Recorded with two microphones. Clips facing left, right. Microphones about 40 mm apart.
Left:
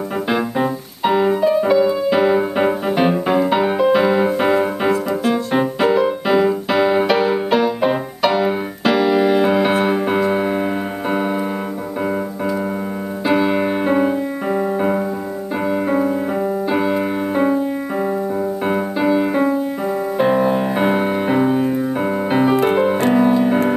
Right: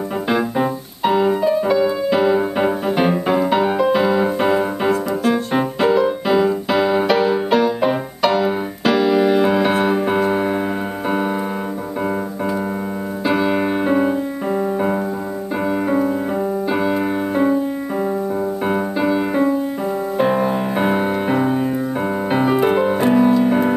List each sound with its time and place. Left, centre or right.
0.3 s music: centre
13.2 s music: centre
18.7 s music: centre